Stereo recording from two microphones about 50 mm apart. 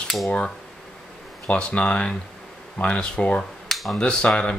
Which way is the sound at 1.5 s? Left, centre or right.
Left.